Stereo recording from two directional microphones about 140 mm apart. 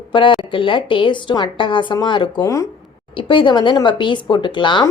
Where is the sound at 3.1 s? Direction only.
35° left (ahead or behind).